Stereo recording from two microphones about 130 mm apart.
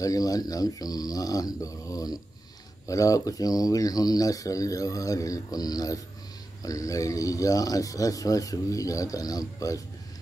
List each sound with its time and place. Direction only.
0.0 s speech: 25° left (ahead or behind)